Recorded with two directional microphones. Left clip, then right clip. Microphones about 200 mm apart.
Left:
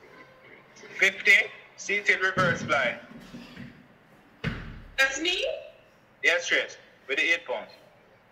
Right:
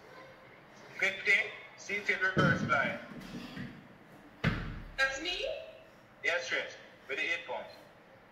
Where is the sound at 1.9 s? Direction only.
55° left (ahead or behind).